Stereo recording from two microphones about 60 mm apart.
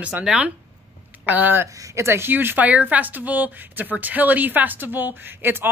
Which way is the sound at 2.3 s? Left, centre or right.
Right.